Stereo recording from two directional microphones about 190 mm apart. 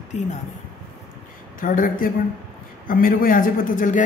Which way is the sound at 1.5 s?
45° left (ahead or behind).